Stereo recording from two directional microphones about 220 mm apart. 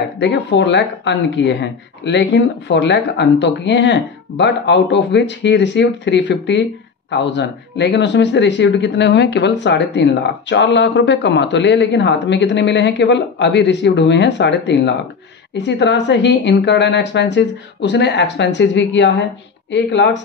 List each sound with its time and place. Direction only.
0.2 s speech: 55° left (ahead or behind)